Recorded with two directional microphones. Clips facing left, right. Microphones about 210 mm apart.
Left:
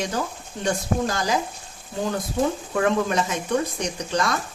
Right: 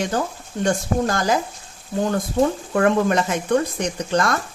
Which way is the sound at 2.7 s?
55° right (ahead or behind).